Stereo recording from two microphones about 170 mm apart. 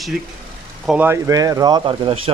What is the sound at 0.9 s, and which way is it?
Speech, 10° right (ahead or behind).